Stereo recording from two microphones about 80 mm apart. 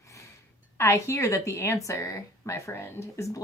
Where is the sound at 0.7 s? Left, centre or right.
Left.